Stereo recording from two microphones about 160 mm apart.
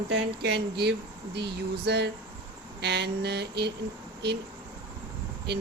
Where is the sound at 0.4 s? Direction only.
90° right.